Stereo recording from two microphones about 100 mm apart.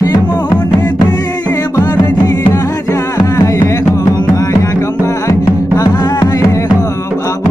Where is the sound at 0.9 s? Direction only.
40° left (ahead or behind).